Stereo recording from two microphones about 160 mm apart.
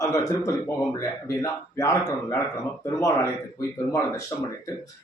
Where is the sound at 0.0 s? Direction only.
20° left (ahead or behind).